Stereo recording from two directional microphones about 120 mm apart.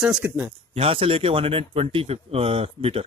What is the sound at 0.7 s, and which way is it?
Speech, 55° right (ahead or behind).